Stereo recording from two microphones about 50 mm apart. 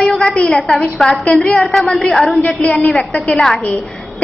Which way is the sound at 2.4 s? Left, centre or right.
Left.